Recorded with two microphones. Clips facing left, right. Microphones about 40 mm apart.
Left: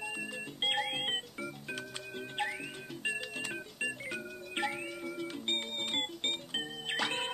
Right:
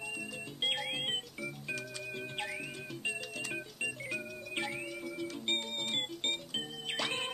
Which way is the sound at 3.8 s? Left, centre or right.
Left.